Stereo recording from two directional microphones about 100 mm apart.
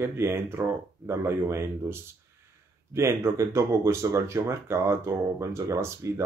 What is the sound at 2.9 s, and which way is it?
Speech, 30° right (ahead or behind).